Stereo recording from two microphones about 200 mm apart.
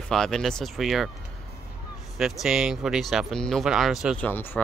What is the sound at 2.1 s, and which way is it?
Speech, centre (ahead or behind).